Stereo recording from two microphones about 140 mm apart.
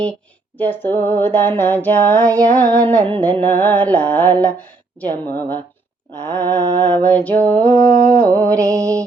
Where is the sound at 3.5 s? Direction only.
15° left (ahead or behind).